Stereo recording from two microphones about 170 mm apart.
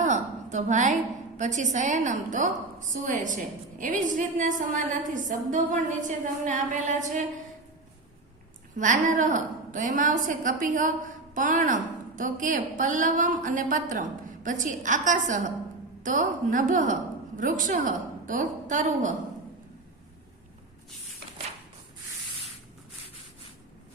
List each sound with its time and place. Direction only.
0.0 s a sound: 45° right (ahead or behind)
1.4 s a woman's voice: 45° right (ahead or behind)
8.8 s a woman's voice: 50° right (ahead or behind)